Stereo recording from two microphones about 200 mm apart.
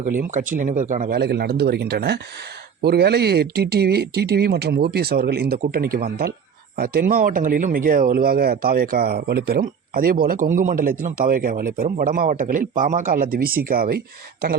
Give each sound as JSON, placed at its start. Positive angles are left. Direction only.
{"t": 0.0, "sound": "speech", "side_deg": -40}